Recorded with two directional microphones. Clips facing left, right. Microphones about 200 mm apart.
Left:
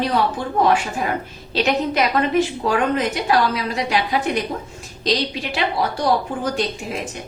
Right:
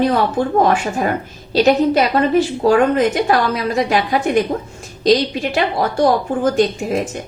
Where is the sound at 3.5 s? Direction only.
50° right (ahead or behind).